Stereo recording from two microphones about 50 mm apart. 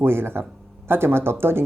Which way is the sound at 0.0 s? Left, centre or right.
Right.